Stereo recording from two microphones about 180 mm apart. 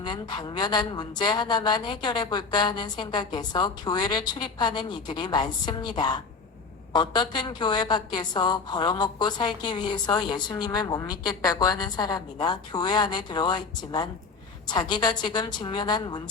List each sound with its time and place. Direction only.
0.0 s a woman's voice: 25° left (ahead or behind)